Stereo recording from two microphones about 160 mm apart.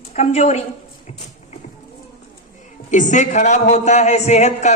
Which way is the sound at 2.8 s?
50° left (ahead or behind).